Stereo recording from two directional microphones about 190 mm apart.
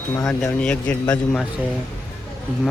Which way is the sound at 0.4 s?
5° left (ahead or behind).